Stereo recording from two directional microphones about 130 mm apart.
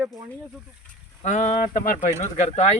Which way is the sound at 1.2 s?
65° left (ahead or behind).